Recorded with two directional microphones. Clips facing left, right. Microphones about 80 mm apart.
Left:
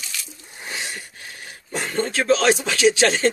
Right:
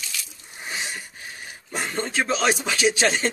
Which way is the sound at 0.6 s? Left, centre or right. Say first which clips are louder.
Even; centre.